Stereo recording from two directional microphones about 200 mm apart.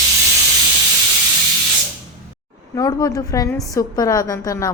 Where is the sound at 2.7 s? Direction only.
15° left (ahead or behind).